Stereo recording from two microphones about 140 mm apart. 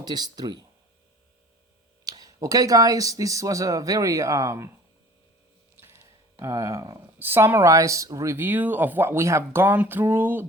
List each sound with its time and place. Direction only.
0.0 s speech: 30° right (ahead or behind)
2.0 s speech: 25° right (ahead or behind)
6.4 s speech: 20° right (ahead or behind)